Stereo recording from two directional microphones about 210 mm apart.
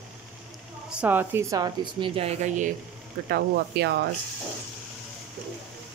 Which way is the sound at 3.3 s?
50° right (ahead or behind).